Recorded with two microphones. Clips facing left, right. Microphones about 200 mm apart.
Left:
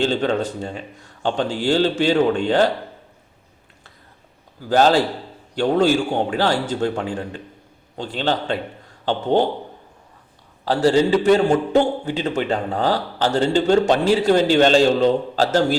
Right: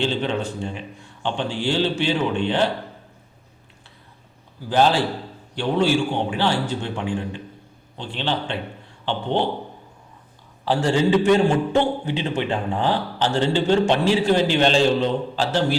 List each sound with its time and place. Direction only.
0.0 s a man's voice: 45° left (ahead or behind)
4.7 s a man's voice: 40° left (ahead or behind)
10.7 s a man's voice: 35° left (ahead or behind)